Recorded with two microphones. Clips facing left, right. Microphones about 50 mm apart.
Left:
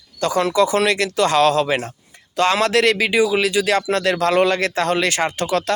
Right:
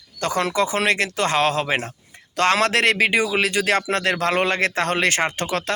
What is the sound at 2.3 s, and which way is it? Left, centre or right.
Speech, right.